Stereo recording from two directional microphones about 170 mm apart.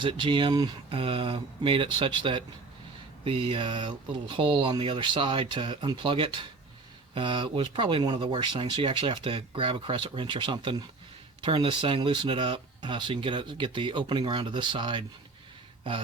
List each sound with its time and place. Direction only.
0.0 s speech: 30° right (ahead or behind)